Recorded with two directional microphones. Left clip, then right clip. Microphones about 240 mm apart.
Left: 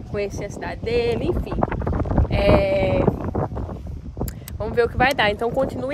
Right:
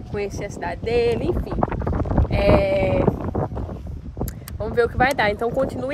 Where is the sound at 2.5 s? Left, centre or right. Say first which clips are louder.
Even; centre.